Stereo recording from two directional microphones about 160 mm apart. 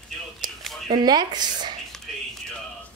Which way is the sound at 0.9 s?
25° right (ahead or behind).